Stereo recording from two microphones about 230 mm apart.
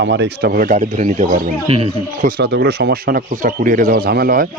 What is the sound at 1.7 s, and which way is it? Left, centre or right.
Speech, right.